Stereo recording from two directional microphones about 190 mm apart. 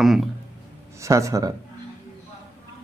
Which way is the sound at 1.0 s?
15° right (ahead or behind).